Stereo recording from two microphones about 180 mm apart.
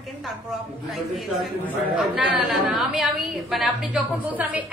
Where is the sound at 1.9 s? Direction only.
Centre (ahead or behind).